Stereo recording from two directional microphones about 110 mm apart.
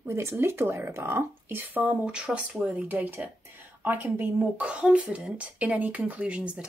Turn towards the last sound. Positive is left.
turn(degrees=-10)  # may be behind; listen again after turning